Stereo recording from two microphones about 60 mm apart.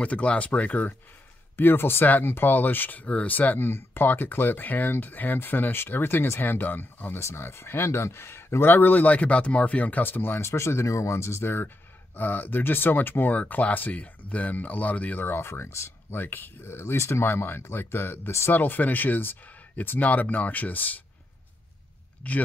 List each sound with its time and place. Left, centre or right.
0.0 s speech: left
7.2 s speech: left
10.5 s speech: left
15.2 s speech: left
17.2 s speech: left
22.2 s speech: left